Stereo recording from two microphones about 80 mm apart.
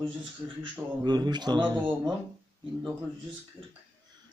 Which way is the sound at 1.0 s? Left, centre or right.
Right.